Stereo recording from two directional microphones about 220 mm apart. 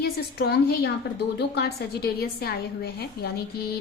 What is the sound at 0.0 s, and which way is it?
A woman's voice, 45° left (ahead or behind).